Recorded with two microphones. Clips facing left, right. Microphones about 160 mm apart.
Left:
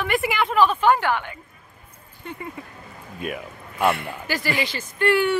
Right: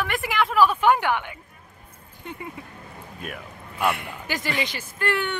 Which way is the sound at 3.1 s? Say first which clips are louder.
Left 7 dB; centre (ahead or behind).